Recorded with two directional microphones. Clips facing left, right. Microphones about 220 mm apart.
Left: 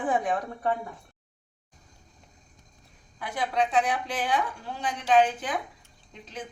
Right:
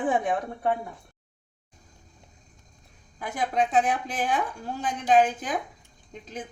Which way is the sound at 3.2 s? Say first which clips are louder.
Right 1 dB; 45° right (ahead or behind).